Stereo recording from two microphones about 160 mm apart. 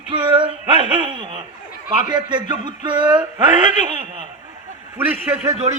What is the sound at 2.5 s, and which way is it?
Speech, 30° right (ahead or behind).